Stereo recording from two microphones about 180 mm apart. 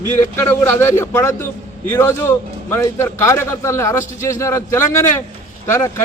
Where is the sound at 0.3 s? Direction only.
15° left (ahead or behind).